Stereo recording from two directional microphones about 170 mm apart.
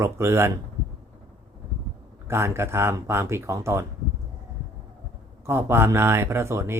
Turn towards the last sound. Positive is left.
turn(degrees=-15)  # may be behind; listen again after turning